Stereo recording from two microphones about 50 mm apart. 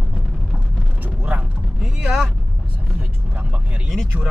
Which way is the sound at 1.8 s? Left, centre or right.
Centre.